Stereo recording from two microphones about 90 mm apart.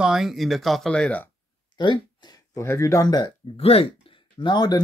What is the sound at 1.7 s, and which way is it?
Speech, 60° left (ahead or behind).